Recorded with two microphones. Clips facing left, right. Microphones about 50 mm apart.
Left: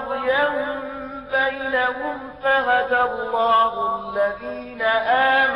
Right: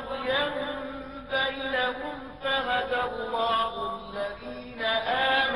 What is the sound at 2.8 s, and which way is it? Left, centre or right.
Mantra, left.